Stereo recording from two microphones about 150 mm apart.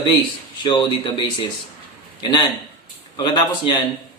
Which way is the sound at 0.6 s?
30° left (ahead or behind).